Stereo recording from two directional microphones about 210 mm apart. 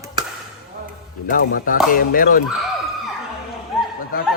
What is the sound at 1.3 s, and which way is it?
A man's voice, 40° left (ahead or behind).